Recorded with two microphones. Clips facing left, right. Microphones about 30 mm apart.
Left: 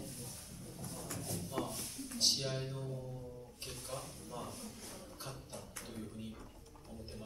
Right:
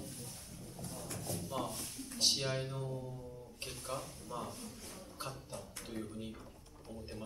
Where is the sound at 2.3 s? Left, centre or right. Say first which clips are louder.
Right 2 dB; centre.